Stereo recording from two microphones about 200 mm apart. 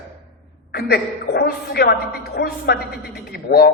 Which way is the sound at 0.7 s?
50° left (ahead or behind).